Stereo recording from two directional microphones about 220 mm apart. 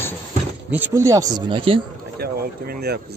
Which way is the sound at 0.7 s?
10° right (ahead or behind).